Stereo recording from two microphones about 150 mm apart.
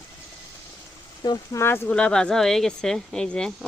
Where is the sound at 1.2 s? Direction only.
25° left (ahead or behind).